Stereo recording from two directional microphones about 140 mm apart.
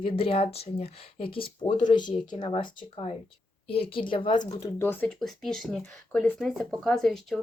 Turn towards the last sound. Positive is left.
turn(degrees=0)  # may be behind; listen again after turning